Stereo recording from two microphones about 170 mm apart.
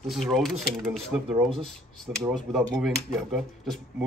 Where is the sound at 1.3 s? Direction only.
30° right (ahead or behind).